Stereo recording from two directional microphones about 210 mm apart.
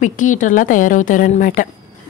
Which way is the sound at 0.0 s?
35° left (ahead or behind).